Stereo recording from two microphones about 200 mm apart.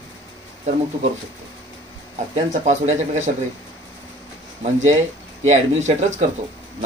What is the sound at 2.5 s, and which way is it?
Speech, 35° right (ahead or behind).